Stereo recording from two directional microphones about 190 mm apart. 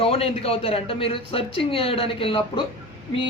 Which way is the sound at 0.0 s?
30° left (ahead or behind).